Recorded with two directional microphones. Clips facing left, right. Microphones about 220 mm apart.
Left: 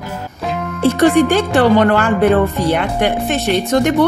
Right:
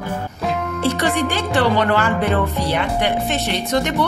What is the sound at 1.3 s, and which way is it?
A woman's voice, 50° left (ahead or behind).